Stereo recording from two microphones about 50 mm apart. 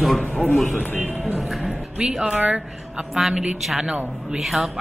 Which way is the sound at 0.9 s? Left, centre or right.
Right.